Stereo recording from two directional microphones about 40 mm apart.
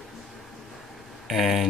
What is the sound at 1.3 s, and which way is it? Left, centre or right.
Speech, centre.